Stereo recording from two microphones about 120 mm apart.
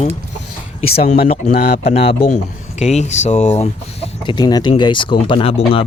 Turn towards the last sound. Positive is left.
turn(degrees=50)  # may be behind; listen again after turning